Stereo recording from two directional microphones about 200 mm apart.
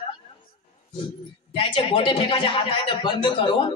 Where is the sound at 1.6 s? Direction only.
25° left (ahead or behind).